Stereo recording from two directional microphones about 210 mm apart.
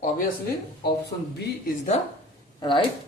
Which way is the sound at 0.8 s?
50° left (ahead or behind).